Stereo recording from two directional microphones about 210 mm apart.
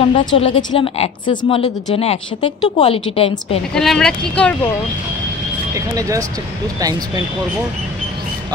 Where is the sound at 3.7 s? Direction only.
5° left (ahead or behind).